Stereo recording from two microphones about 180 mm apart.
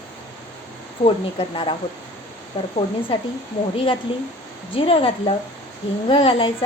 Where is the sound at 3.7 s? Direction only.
30° left (ahead or behind).